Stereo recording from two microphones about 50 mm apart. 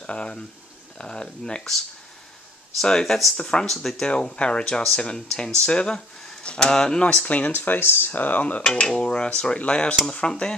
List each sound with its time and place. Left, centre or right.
0.0 s speech: left
2.8 s speech: centre
3.6 s speech: centre
4.4 s dishes: centre
6.4 s speech: centre
7.1 s speech: left
8.6 s dishes: centre
10.0 s speech: centre